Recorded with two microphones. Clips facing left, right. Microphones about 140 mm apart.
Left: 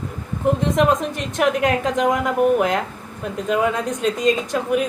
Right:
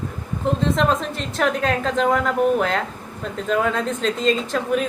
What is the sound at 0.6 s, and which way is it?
A woman's voice, 15° left (ahead or behind).